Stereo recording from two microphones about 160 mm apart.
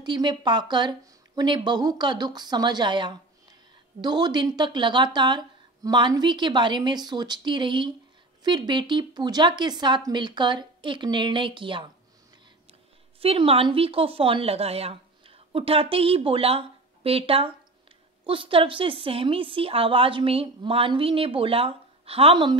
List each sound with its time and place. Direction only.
0.0 s speech: 30° right (ahead or behind)
13.2 s a woman's voice: 35° right (ahead or behind)